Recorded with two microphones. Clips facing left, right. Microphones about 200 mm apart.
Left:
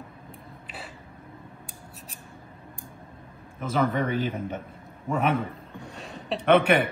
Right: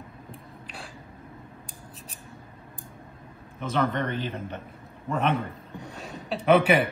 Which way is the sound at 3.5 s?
5° left (ahead or behind).